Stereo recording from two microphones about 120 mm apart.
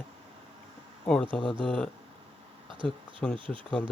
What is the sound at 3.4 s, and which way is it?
Speech, 45° right (ahead or behind).